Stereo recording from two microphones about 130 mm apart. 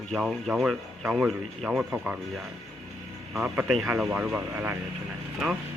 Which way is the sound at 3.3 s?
10° right (ahead or behind).